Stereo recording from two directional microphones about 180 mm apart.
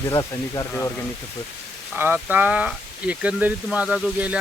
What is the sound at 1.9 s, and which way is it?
Speech, 10° right (ahead or behind).